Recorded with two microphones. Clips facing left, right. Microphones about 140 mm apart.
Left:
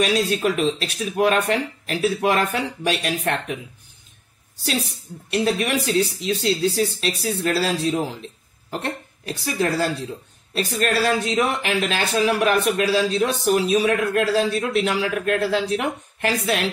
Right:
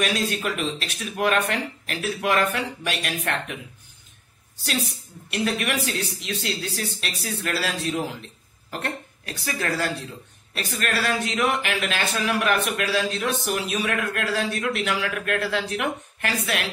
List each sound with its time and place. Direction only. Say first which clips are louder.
0.0 s speech: left 5 dB; 35° left (ahead or behind)
5.3 s speech: left 4 dB; 35° left (ahead or behind)
8.6 s cough: left 3 dB; 30° left (ahead or behind)
9.4 s speech: left 5 dB; 30° left (ahead or behind)